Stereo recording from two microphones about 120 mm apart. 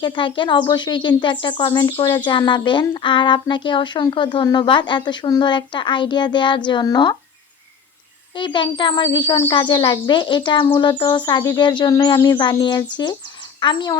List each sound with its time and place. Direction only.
0.0 s a child's voice: 40° left (ahead or behind)
8.4 s a child's voice: 40° left (ahead or behind)